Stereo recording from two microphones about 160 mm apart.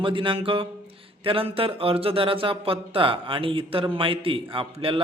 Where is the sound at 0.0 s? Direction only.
30° right (ahead or behind).